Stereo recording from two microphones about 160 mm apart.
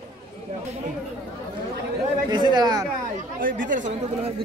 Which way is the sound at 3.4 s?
55° right (ahead or behind).